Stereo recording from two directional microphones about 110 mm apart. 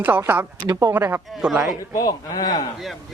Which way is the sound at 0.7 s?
30° right (ahead or behind).